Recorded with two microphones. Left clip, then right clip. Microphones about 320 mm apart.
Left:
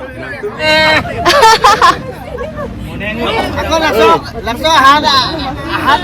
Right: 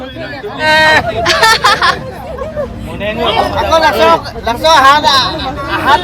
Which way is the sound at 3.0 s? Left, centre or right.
Right.